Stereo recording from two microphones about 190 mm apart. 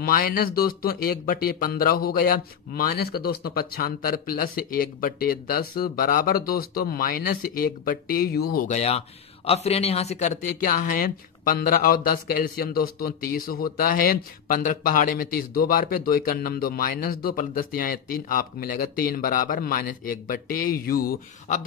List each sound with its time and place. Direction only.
0.0 s speech: 50° left (ahead or behind)
8.6 s speech: 35° left (ahead or behind); by 21.5 s 50° left (ahead or behind)